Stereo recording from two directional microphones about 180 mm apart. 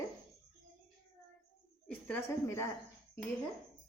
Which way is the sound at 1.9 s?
10° left (ahead or behind).